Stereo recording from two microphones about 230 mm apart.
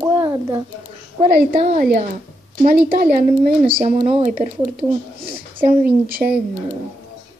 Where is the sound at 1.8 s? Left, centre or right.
Right.